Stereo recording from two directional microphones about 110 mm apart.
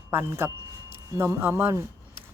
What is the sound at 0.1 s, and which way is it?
Speech, 20° right (ahead or behind).